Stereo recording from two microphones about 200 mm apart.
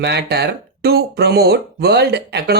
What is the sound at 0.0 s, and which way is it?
Speech, 55° right (ahead or behind).